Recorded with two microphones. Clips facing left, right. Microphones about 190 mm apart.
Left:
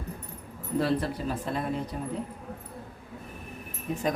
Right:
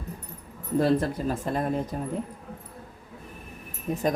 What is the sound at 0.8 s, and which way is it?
Speech, 45° right (ahead or behind).